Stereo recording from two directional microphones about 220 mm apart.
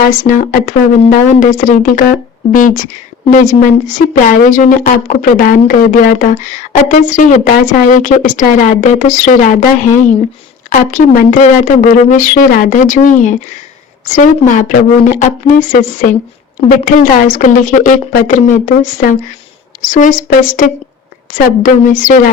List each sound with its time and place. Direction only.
0.0 s a woman's voice: 40° left (ahead or behind)
10.7 s a woman's voice: 35° left (ahead or behind)